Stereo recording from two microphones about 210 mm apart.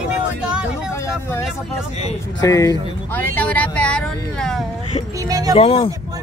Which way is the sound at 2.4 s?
15° left (ahead or behind).